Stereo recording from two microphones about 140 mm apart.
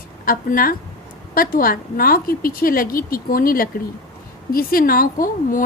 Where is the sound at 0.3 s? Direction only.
90° left.